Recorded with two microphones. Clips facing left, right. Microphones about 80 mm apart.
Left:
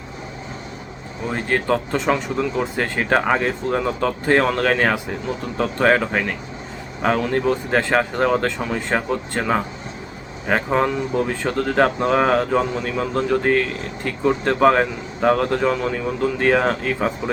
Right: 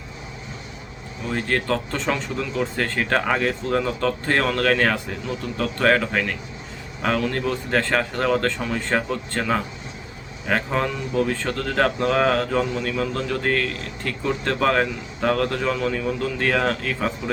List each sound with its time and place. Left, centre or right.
1.3 s speech: centre